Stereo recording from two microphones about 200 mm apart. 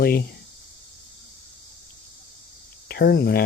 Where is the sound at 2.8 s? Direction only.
50° left (ahead or behind).